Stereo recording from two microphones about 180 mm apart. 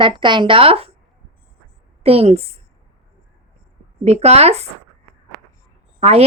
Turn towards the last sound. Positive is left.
turn(degrees=-35)  # may be behind; listen again after turning